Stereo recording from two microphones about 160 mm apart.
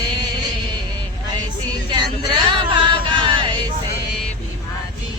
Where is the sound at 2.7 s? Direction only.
30° right (ahead or behind).